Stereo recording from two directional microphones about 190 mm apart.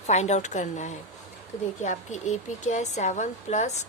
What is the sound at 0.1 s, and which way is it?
A woman's voice, 35° left (ahead or behind).